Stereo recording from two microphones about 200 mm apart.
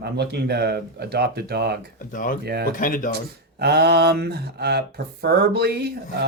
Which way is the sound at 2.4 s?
55° right (ahead or behind).